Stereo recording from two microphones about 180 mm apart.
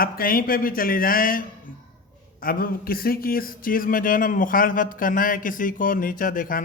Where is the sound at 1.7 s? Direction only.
90° left.